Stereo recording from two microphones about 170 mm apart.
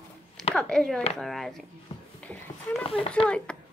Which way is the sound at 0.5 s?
5° left (ahead or behind).